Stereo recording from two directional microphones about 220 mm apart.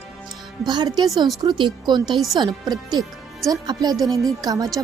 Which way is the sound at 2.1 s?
Centre (ahead or behind).